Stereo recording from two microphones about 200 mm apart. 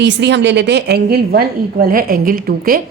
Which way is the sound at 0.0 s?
60° right (ahead or behind).